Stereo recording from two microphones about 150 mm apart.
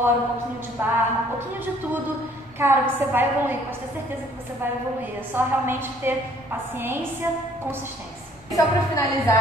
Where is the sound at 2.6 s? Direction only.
15° right (ahead or behind).